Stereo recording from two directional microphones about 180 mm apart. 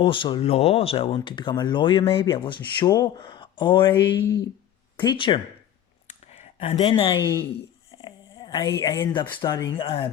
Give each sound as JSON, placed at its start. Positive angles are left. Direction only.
{"t": 0.0, "sound": "speech", "side_deg": 30}
{"t": 6.3, "sound": "a sound", "side_deg": 40}
{"t": 6.9, "sound": "speech", "side_deg": 25}
{"t": 8.0, "sound": "a sound", "side_deg": 25}
{"t": 8.8, "sound": "speech", "side_deg": 25}
{"t": 9.7, "sound": "speech", "side_deg": 30}